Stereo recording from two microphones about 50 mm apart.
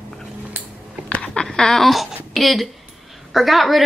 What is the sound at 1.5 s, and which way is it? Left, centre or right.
A woman's voice, centre.